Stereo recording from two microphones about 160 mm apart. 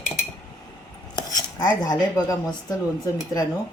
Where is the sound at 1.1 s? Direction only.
25° left (ahead or behind).